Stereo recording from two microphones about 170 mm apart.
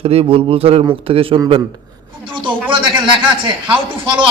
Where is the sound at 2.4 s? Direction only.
30° right (ahead or behind).